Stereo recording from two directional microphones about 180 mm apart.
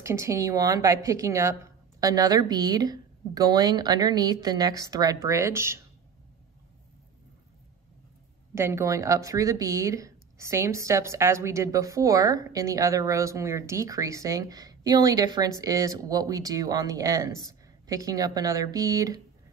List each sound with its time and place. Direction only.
0.0 s speech: 15° right (ahead or behind)
8.5 s speech: 15° right (ahead or behind)